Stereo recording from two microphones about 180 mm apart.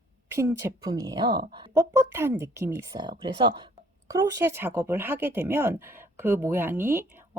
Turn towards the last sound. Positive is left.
turn(degrees=-10)  # may be behind; listen again after turning